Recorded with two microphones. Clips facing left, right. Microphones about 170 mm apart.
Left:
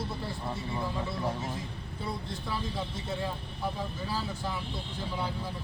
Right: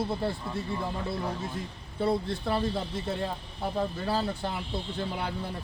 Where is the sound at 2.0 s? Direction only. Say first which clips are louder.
Right 10 dB; 60° right (ahead or behind).